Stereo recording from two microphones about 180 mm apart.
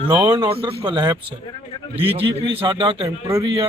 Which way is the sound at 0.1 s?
25° right (ahead or behind).